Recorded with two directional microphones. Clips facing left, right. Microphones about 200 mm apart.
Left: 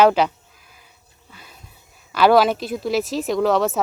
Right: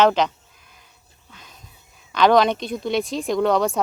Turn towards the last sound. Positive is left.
turn(degrees=0)  # may be behind; listen again after turning